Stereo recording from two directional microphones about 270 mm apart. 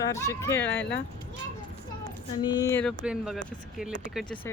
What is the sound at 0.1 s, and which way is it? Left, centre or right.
Speech, centre.